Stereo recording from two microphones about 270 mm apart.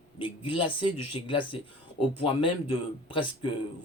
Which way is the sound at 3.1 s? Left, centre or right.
Centre.